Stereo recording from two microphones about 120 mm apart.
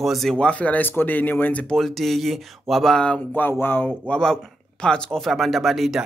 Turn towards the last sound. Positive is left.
turn(degrees=0)  # may be behind; listen again after turning